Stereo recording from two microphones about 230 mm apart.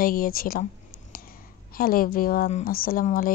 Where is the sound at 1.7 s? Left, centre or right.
Left.